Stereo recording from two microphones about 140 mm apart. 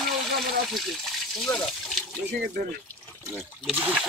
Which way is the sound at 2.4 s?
90° right.